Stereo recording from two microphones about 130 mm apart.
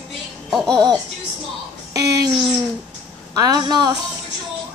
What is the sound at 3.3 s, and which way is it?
Speech, 30° right (ahead or behind).